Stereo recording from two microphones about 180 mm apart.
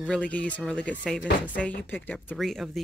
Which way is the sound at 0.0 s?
5° left (ahead or behind).